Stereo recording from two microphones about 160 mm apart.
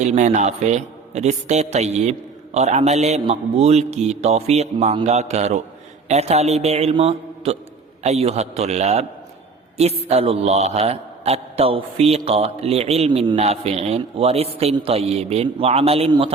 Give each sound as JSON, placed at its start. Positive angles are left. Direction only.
{"t": 0.0, "sound": "a man's voice", "side_deg": -45}
{"t": 10.1, "sound": "a man's voice", "side_deg": -40}